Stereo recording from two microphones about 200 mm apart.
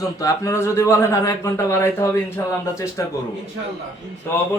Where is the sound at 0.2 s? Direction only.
15° left (ahead or behind).